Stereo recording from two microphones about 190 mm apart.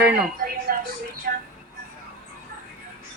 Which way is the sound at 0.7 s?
55° right (ahead or behind).